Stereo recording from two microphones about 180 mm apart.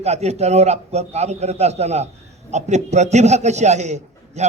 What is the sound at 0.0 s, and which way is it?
A man's voice, 35° right (ahead or behind).